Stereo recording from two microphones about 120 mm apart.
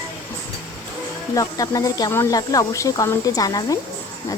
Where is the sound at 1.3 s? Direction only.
30° left (ahead or behind).